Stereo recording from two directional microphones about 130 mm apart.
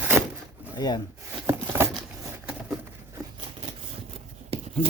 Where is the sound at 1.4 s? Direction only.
20° right (ahead or behind).